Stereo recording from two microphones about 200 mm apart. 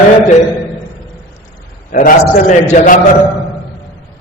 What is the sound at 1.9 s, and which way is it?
A man's voice, 45° left (ahead or behind).